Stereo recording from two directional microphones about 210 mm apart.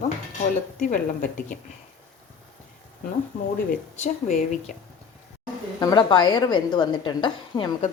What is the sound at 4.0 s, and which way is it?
Speech, 35° left (ahead or behind).